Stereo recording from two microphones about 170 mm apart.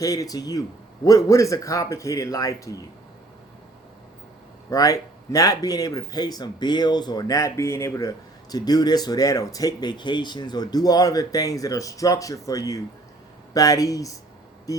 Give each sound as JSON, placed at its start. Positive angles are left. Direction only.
{"t": 0.0, "sound": "speech", "side_deg": 20}
{"t": 4.7, "sound": "speech", "side_deg": 20}
{"t": 14.7, "sound": "music", "side_deg": 20}